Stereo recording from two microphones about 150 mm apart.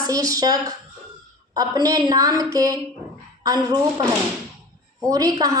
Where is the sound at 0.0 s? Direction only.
25° right (ahead or behind).